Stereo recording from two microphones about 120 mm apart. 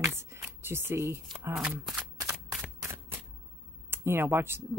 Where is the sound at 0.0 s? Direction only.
20° right (ahead or behind).